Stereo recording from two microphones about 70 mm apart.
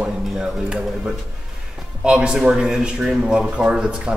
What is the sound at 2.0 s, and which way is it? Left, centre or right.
A man's voice, centre.